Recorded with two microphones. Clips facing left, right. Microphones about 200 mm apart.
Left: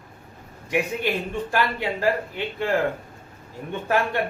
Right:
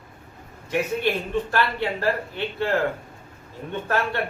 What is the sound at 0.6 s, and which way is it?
A man's voice, 15° left (ahead or behind).